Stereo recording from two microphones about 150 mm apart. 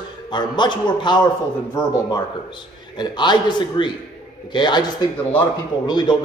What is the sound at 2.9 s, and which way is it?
A man's voice, 30° left (ahead or behind).